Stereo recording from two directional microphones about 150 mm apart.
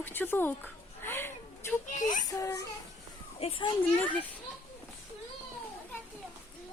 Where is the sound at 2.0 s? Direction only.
60° left (ahead or behind).